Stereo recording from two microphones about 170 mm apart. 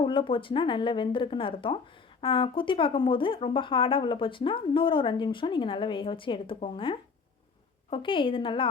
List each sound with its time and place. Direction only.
0.0 s a woman's voice: 30° left (ahead or behind)